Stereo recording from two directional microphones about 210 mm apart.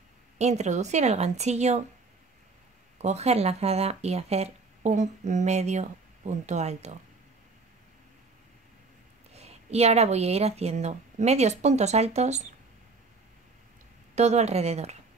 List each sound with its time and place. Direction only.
0.4 s speech: 35° right (ahead or behind)
3.0 s speech: 30° right (ahead or behind)
9.3 s speech: 30° right (ahead or behind)
14.1 s speech: 30° right (ahead or behind)